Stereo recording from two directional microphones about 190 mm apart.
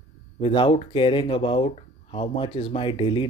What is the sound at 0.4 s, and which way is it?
Speech, 25° left (ahead or behind).